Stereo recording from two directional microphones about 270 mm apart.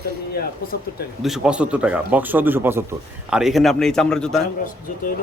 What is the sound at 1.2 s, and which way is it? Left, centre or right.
A man's voice, centre.